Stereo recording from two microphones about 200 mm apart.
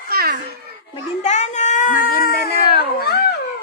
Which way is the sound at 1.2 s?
35° left (ahead or behind).